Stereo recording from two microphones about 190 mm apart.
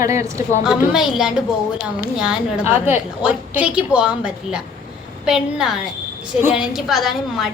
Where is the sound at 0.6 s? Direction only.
Centre (ahead or behind).